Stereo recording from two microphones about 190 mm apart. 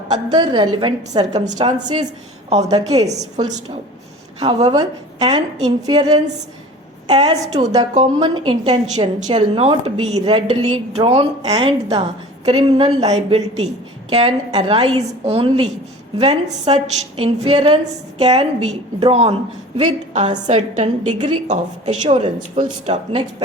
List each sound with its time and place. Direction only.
0.3 s a woman's voice: 25° right (ahead or behind)
4.6 s a woman's voice: 20° right (ahead or behind); by 23.0 s 40° right (ahead or behind)